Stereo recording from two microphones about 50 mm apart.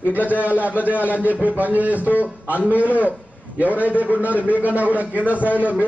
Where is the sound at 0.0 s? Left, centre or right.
Right.